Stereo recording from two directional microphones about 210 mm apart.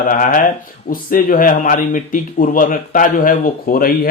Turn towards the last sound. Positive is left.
turn(degrees=45)  # may be behind; listen again after turning